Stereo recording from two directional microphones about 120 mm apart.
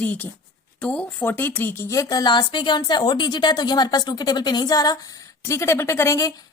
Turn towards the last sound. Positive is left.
turn(degrees=25)  # may be behind; listen again after turning